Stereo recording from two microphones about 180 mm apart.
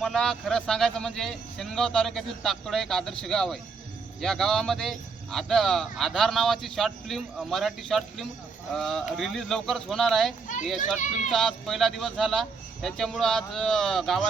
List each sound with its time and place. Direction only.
0.0 s speech: 5° left (ahead or behind)
10.8 s a child's voice: 45° left (ahead or behind)
11.3 s speech: centre (ahead or behind)